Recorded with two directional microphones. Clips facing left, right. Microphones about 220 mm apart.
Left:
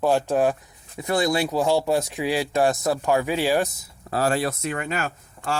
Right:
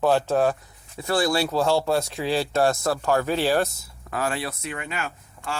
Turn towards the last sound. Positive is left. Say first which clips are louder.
# left 4 dB
turn(degrees=40)  # may be behind; listen again after turning